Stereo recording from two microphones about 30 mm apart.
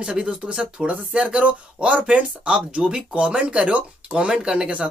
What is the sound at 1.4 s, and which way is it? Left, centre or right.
Speech, right.